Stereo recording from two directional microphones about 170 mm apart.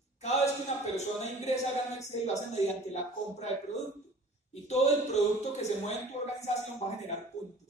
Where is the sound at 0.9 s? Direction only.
40° left (ahead or behind).